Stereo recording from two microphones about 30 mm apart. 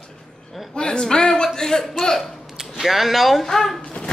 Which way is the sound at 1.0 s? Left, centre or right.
Left.